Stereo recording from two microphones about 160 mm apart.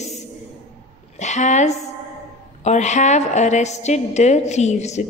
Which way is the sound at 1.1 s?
45° left (ahead or behind).